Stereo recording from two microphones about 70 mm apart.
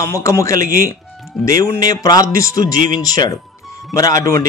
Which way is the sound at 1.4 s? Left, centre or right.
Left.